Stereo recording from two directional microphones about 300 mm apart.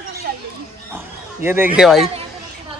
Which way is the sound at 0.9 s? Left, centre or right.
Centre.